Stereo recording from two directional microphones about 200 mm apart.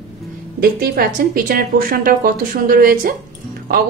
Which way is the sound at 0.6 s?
50° right (ahead or behind).